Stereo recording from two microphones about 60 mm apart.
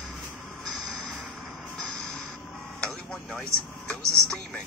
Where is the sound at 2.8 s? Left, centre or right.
Centre.